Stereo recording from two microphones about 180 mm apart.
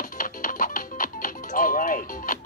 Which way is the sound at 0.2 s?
50° left (ahead or behind).